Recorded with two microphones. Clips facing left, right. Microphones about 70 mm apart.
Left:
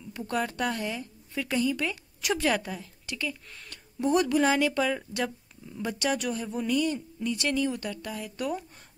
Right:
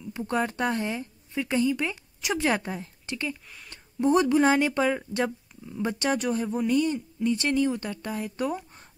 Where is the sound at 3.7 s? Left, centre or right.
Right.